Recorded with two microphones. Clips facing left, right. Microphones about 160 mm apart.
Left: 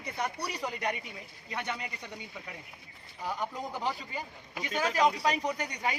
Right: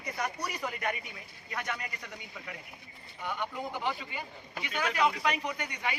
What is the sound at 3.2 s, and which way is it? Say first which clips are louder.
Speech: left 1 dB; 35° left (ahead or behind).